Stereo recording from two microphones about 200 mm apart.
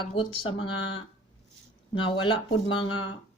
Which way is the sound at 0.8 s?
75° left (ahead or behind).